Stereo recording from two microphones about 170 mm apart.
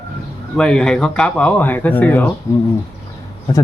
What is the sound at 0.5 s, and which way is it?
Speech, 5° left (ahead or behind).